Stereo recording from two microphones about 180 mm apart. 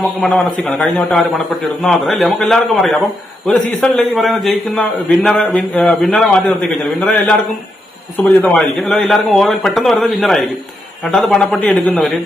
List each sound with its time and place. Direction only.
0.2 s speech: centre (ahead or behind)
8.4 s speech: 10° left (ahead or behind)